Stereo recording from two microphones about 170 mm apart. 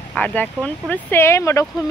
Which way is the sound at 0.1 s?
10° left (ahead or behind).